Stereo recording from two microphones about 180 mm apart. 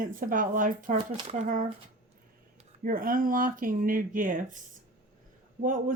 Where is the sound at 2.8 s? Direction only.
50° right (ahead or behind).